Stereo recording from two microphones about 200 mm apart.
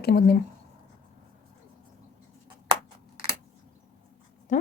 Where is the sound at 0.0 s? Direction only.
50° left (ahead or behind).